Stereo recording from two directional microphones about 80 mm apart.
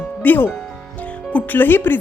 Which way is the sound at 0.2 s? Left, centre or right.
Left.